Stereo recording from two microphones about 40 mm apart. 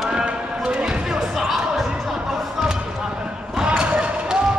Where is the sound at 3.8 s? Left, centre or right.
Right.